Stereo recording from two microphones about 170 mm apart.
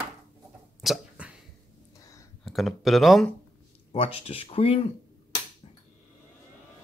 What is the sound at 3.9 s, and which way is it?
Speech, 35° left (ahead or behind).